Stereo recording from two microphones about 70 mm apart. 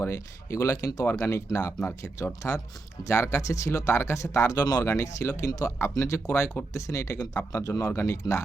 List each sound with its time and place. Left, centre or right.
0.0 s speech: left
4.9 s speech: left
7.9 s speech: left